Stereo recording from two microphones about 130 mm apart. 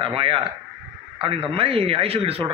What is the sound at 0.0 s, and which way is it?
Speech, 45° right (ahead or behind).